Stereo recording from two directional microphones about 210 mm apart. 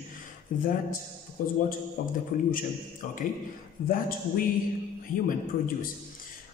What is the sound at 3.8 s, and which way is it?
Speech, 40° left (ahead or behind).